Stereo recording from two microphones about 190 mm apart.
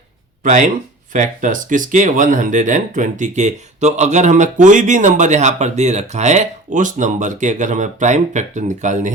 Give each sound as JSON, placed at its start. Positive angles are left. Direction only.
{"t": 0.4, "sound": "speech", "side_deg": -40}